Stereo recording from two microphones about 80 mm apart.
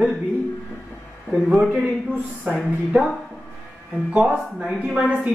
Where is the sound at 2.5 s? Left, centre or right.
Centre.